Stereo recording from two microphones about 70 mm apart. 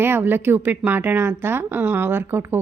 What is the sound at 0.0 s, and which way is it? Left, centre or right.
A woman's voice, right.